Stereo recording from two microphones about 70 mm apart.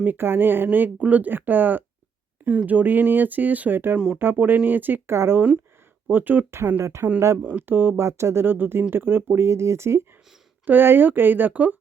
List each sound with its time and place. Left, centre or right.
0.0 s speech: right
3.9 s speech: centre
4.2 s speech: right
6.5 s speech: right
7.4 s speech: right
8.0 s speech: right
10.7 s speech: right